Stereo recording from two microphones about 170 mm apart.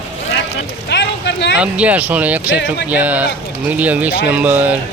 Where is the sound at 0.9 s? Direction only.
90° left.